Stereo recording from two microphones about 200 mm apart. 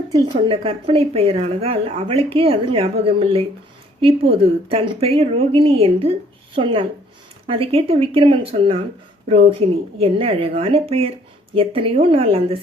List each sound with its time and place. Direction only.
0.1 s speech: 25° right (ahead or behind)